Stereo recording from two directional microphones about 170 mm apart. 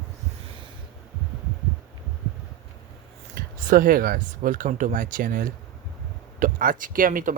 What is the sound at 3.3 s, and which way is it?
Speech, 55° right (ahead or behind).